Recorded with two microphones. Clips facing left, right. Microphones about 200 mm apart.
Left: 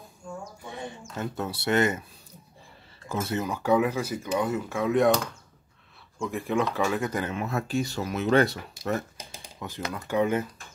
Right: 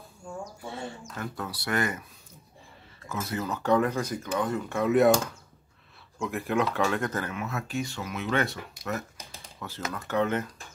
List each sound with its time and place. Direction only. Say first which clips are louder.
0.7 s speech: left 1 dB; 15° left (ahead or behind)
3.1 s speech: left 3 dB; 30° left (ahead or behind)
3.4 s speech: even; 10° left (ahead or behind)
6.1 s speech: left 1 dB; centre (ahead or behind)
7.2 s speech: left 4 dB; 30° left (ahead or behind)
9.6 s speech: left 2 dB; 15° left (ahead or behind)